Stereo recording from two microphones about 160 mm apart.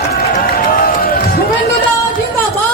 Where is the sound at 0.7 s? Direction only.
65° left (ahead or behind).